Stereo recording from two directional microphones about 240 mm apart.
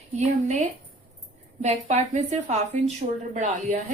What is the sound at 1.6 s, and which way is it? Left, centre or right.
A woman's voice, right.